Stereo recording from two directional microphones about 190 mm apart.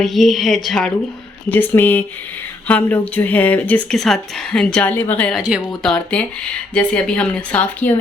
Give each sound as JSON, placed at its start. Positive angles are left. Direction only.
{"t": 0.0, "sound": "a woman's voice", "side_deg": 0}
{"t": 5.4, "sound": "a woman's voice", "side_deg": -5}